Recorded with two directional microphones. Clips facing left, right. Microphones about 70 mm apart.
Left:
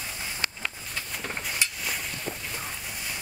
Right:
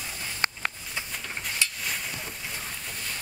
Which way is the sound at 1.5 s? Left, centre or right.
Centre.